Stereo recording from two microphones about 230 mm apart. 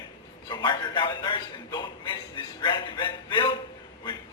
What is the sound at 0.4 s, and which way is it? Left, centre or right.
A man's voice, centre.